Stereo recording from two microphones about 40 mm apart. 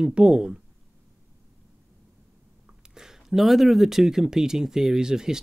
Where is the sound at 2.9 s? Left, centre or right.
Centre.